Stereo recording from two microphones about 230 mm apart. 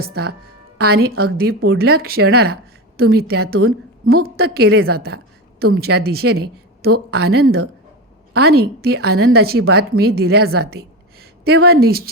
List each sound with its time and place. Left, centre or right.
0.0 s a woman's voice: right
4.0 s a woman's voice: right
4.4 s a woman's voice: right